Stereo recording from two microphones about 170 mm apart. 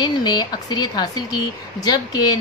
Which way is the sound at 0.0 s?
25° left (ahead or behind).